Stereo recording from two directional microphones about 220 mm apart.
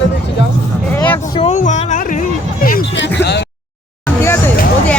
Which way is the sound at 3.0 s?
50° left (ahead or behind).